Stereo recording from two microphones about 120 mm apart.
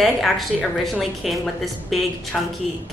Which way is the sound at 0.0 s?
Centre (ahead or behind).